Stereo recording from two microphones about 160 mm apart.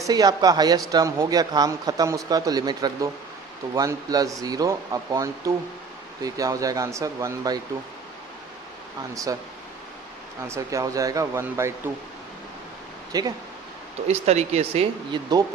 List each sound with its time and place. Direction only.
0.0 s speech: 25° right (ahead or behind)
10.4 s speech: 20° right (ahead or behind)
13.1 s speech: 25° right (ahead or behind)
14.1 s speech: 40° right (ahead or behind)